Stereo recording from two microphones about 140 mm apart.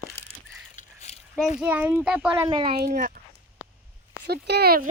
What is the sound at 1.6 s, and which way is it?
Speech, 10° right (ahead or behind).